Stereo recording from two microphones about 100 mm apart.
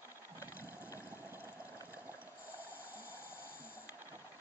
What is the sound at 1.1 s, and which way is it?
Water, 20° right (ahead or behind).